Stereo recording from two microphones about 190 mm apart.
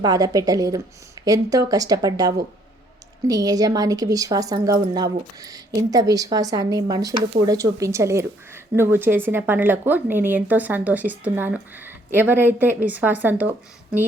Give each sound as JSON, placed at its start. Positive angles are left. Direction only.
{"t": 0.0, "sound": "a woman's voice", "side_deg": -20}